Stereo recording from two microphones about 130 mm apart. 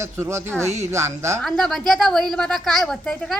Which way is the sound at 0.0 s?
20° right (ahead or behind).